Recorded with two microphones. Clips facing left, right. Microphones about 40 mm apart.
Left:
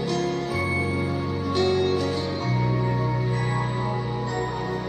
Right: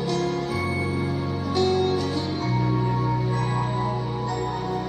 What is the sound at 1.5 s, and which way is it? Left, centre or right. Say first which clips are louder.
Music: right 1 dB; left.